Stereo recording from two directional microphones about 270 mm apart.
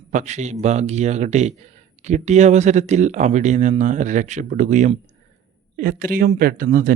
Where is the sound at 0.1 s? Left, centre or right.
Right.